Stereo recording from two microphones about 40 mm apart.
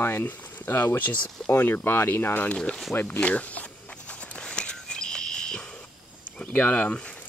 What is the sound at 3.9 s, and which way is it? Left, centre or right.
Walk, left.